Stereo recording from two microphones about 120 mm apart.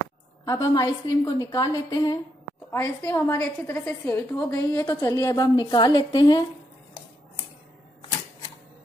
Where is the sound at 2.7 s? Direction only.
20° left (ahead or behind); by 6.4 s 35° left (ahead or behind).